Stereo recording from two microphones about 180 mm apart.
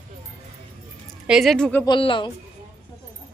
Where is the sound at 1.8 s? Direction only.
25° left (ahead or behind).